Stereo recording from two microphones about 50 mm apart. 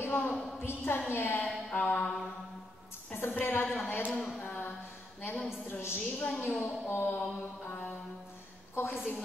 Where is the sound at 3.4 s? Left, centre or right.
Left.